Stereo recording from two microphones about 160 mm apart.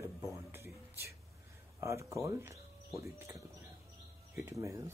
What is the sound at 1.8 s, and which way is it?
Speech, 20° right (ahead or behind).